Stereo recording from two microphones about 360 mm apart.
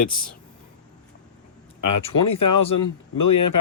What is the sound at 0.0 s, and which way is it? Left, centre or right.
Speech, left.